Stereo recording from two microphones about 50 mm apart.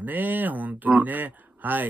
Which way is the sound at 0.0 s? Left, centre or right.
Right.